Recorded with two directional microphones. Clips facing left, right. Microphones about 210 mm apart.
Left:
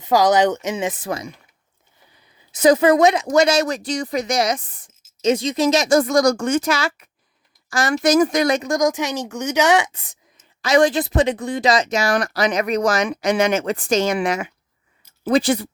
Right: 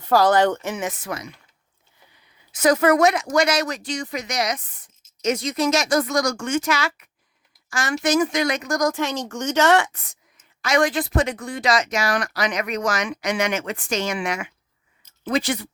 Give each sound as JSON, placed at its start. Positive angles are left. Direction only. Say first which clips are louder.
{"t": 0.0, "sound": "speech", "louder": "left 1 dB", "side_deg": 15}
{"t": 2.6, "sound": "speech", "louder": "left 3 dB", "side_deg": 20}
{"t": 8.6, "sound": "speech", "louder": "left 3 dB", "side_deg": 20}